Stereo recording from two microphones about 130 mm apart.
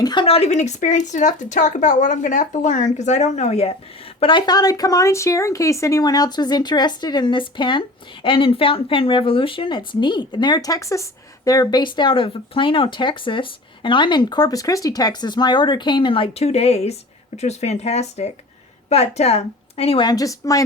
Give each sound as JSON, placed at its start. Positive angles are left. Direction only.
{"t": 0.0, "sound": "speech", "side_deg": 35}
{"t": 0.3, "sound": "speech", "side_deg": 55}
{"t": 4.2, "sound": "a woman's voice", "side_deg": 40}
{"t": 20.1, "sound": "speech", "side_deg": 25}